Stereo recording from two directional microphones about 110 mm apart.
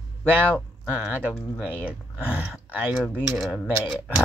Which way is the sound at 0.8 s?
15° right (ahead or behind).